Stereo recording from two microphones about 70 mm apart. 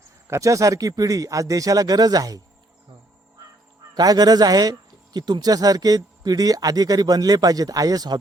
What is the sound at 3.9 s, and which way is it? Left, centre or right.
Speech, right.